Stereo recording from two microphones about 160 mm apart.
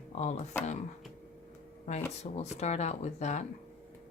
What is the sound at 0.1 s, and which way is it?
Speech, 45° left (ahead or behind).